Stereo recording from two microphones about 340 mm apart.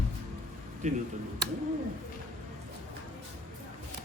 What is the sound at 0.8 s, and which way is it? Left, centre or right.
Speech, right.